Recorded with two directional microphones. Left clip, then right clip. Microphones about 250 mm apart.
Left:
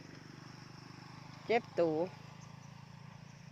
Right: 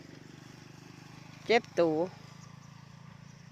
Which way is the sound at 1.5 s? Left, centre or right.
Centre.